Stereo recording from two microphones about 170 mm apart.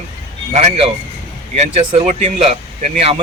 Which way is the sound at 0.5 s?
40° right (ahead or behind).